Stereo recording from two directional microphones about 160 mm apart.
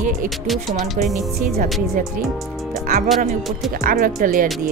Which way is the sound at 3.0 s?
Centre (ahead or behind).